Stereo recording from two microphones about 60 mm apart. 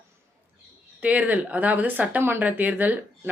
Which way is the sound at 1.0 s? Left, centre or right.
Right.